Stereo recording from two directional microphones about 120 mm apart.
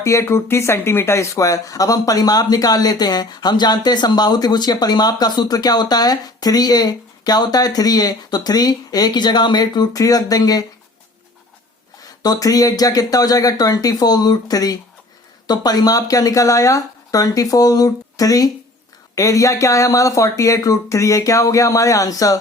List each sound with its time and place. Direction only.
0.0 s speech: 25° left (ahead or behind)
12.2 s speech: 30° left (ahead or behind)